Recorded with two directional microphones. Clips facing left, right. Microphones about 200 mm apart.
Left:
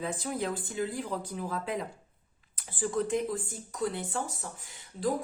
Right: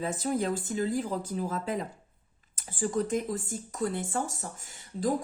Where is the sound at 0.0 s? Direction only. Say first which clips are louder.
Right 4 dB; 40° right (ahead or behind).